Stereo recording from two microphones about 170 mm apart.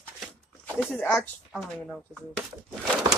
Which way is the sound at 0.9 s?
10° left (ahead or behind).